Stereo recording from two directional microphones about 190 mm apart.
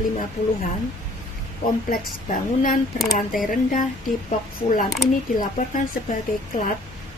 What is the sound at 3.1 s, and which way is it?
A woman's voice, 45° left (ahead or behind).